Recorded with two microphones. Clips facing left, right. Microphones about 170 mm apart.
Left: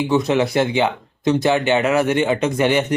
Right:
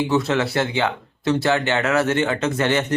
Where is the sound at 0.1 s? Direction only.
15° left (ahead or behind).